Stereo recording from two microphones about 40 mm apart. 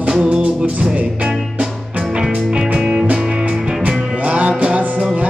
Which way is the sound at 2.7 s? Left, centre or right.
Centre.